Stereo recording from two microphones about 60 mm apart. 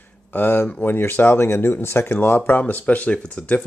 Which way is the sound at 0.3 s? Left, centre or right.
Left.